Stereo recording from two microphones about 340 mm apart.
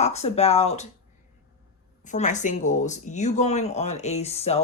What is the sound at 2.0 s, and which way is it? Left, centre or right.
Speech, left.